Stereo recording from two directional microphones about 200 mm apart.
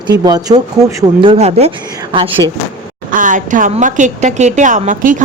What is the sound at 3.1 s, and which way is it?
A woman's voice, 40° right (ahead or behind).